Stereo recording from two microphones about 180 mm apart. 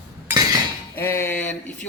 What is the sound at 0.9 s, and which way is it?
Speech, 15° left (ahead or behind).